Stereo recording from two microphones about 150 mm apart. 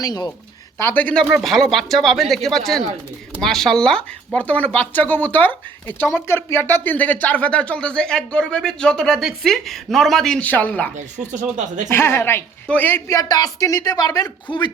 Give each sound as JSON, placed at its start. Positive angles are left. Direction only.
{"t": 0.0, "sound": "a woman's voice", "side_deg": 25}
{"t": 0.8, "sound": "speech", "side_deg": 15}
{"t": 10.9, "sound": "speech", "side_deg": -55}
{"t": 11.9, "sound": "a woman's voice", "side_deg": 15}